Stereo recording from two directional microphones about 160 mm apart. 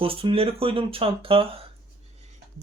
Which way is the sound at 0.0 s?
35° right (ahead or behind).